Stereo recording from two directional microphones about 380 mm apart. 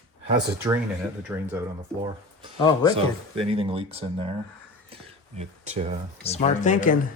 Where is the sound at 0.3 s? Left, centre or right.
Centre.